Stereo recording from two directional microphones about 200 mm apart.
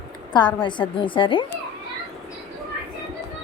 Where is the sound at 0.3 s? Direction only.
20° left (ahead or behind).